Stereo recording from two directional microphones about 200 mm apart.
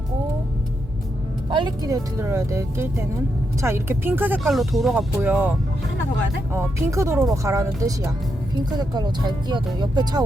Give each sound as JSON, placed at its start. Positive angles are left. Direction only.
{"t": 1.5, "sound": "speech", "side_deg": -25}